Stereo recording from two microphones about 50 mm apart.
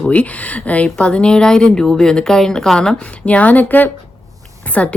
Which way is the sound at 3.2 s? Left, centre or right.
Left.